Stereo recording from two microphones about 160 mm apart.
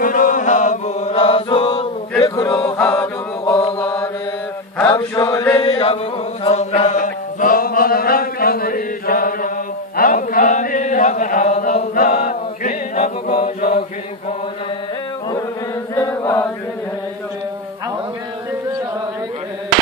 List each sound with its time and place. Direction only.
0.0 s chant: 55° left (ahead or behind); by 3.6 s 15° left (ahead or behind)
3.7 s mantra: 15° left (ahead or behind)
5.5 s chant: 35° left (ahead or behind)
6.4 s chant: 45° left (ahead or behind)
6.7 s mantra: 45° left (ahead or behind); by 9.5 s 65° left (ahead or behind)
9.9 s chant: 60° left (ahead or behind)
15.9 s chant: 20° left (ahead or behind)